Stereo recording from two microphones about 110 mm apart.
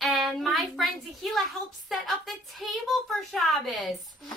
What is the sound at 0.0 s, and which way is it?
Speech, centre (ahead or behind).